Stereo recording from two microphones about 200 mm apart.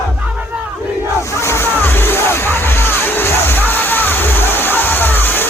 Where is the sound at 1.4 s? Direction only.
10° left (ahead or behind).